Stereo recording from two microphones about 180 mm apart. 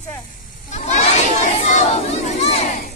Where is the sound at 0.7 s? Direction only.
40° left (ahead or behind).